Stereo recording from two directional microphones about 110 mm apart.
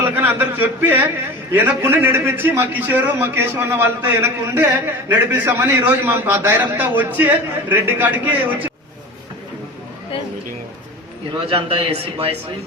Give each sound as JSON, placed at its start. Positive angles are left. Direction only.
{"t": 0.0, "sound": "a man's voice", "side_deg": -20}
{"t": 11.4, "sound": "speech", "side_deg": -60}